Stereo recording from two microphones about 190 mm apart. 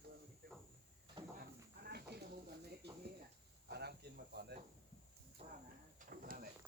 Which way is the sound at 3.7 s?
60° right (ahead or behind).